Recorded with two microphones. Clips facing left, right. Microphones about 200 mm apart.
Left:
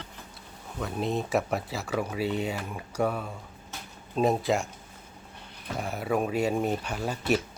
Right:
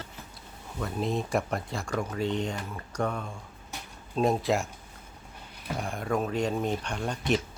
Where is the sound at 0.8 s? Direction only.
5° left (ahead or behind).